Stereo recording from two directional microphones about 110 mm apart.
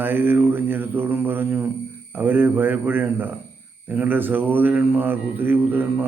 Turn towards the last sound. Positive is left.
turn(degrees=-15)  # may be behind; listen again after turning